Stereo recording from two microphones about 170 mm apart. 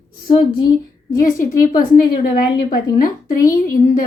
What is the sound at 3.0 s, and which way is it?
Speech, 55° left (ahead or behind).